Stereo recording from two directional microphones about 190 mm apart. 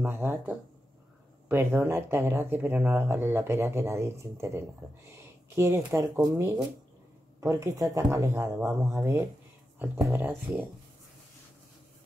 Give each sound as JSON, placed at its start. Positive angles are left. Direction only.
{"t": 0.0, "sound": "speech", "side_deg": -15}